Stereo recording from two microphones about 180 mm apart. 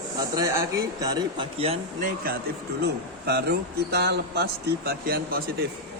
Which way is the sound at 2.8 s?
65° right (ahead or behind).